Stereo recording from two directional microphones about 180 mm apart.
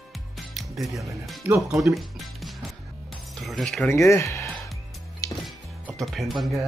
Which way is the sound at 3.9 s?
15° left (ahead or behind).